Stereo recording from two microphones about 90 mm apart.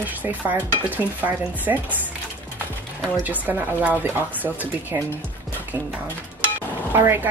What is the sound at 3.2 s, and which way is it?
Speech, 20° right (ahead or behind).